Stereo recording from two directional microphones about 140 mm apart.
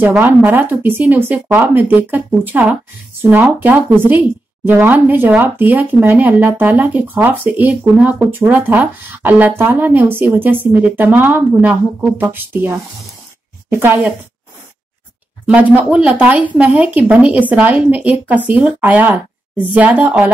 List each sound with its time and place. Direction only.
0.0 s a woman's voice: 15° right (ahead or behind)
15.4 s a woman's voice: 10° right (ahead or behind)